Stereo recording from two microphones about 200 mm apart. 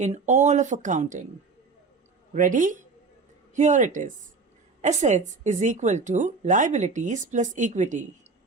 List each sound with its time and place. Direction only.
0.0 s speech: 35° right (ahead or behind)
2.3 s speech: 40° right (ahead or behind)